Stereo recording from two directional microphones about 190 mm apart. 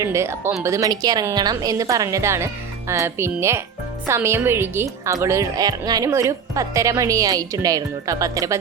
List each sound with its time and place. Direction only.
0.0 s a woman's voice: 15° right (ahead or behind)